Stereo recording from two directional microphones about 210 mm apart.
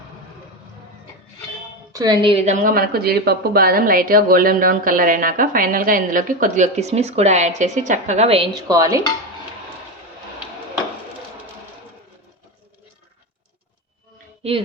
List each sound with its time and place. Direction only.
1.9 s a woman's voice: 20° right (ahead or behind)